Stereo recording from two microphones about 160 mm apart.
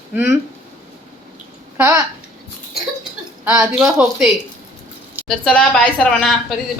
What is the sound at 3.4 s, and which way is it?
Speech, 20° right (ahead or behind).